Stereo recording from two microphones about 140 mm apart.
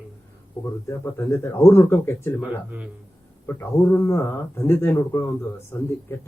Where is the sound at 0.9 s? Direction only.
20° left (ahead or behind).